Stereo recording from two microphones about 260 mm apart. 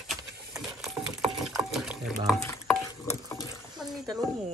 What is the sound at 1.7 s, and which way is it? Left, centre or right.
Stir, centre.